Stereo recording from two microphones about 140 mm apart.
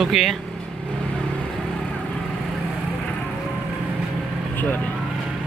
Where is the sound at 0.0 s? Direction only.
Centre (ahead or behind).